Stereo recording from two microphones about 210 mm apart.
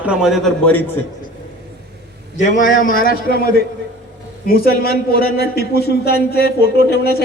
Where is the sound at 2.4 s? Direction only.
35° left (ahead or behind).